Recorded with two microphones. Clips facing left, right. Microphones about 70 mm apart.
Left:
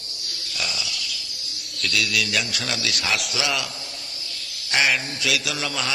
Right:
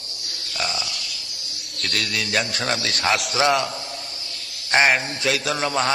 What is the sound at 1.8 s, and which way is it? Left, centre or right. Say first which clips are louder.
A man's voice: left 2 dB; right.